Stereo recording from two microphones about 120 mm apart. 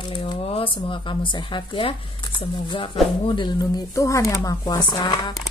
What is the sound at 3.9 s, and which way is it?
Speech, 25° left (ahead or behind).